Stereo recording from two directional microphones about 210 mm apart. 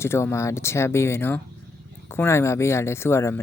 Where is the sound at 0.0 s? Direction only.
10° left (ahead or behind).